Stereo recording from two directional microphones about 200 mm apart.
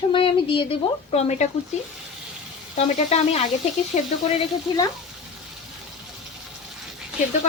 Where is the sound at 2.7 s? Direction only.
30° left (ahead or behind).